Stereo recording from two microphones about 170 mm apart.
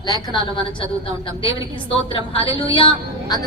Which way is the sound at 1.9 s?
30° left (ahead or behind).